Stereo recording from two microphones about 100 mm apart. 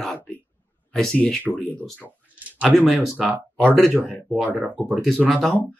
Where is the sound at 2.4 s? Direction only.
15° right (ahead or behind).